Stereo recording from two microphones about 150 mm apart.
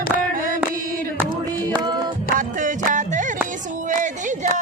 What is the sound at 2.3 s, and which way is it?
Music, 60° right (ahead or behind).